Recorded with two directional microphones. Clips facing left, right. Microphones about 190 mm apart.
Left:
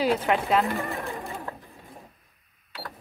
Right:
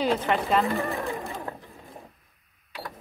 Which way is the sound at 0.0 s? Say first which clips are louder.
Left 1 dB; 5° left (ahead or behind).